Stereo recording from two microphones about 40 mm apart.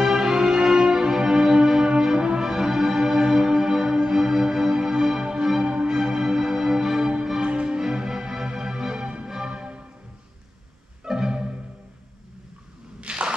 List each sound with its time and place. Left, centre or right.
0.0 s music: centre
9.0 s music: right
11.1 s music: centre
13.0 s a sound: right